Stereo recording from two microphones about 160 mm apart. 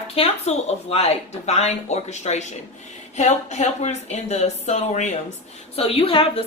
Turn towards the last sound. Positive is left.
turn(degrees=35)  # may be behind; listen again after turning